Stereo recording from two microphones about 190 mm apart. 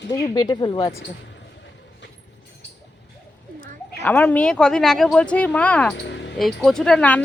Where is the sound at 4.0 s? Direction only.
10° left (ahead or behind).